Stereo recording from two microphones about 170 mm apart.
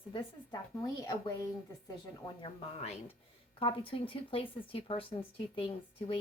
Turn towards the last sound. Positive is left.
turn(degrees=30)  # may be behind; listen again after turning